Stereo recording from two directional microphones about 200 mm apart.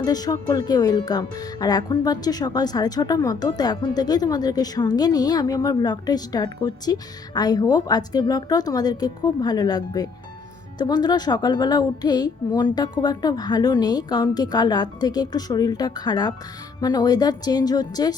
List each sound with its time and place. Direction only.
0.0 s speech: 20° left (ahead or behind)